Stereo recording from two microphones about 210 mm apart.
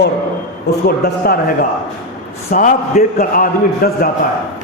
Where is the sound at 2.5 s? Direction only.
40° left (ahead or behind).